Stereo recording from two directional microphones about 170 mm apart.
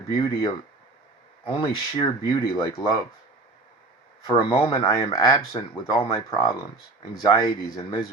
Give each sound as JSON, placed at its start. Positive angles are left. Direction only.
{"t": 0.1, "sound": "speech", "side_deg": 25}
{"t": 1.5, "sound": "speech", "side_deg": 25}
{"t": 4.3, "sound": "speech", "side_deg": 30}